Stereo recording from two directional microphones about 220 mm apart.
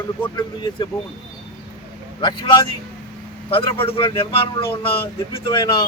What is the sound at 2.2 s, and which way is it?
Speech, 20° left (ahead or behind).